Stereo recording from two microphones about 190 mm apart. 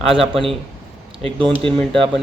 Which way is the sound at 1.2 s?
25° right (ahead or behind).